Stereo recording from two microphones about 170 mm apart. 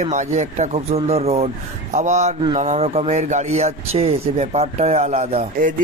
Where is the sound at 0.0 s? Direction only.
45° right (ahead or behind).